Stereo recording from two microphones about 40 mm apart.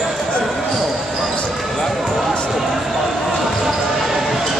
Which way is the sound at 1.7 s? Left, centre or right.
Centre.